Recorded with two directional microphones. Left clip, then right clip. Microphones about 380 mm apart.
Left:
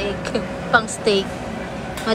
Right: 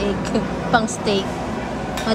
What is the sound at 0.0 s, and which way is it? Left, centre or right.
A woman's voice, centre.